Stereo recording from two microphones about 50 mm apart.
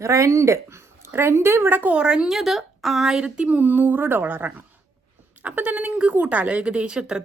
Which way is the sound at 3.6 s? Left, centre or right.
Right.